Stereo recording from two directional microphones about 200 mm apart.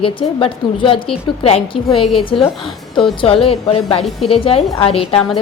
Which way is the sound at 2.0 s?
Centre (ahead or behind).